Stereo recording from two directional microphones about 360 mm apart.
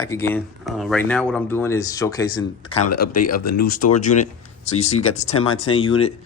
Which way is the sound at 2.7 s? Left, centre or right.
Left.